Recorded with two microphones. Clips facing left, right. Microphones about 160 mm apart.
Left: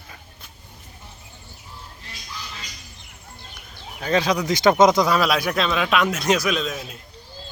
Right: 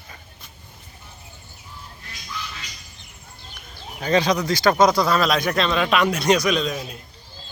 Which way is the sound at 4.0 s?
Centre (ahead or behind).